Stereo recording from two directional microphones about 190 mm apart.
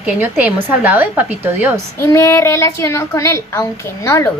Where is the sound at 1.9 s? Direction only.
15° left (ahead or behind).